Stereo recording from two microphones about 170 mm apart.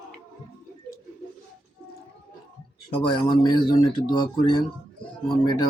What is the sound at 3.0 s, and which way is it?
Speech, 25° left (ahead or behind).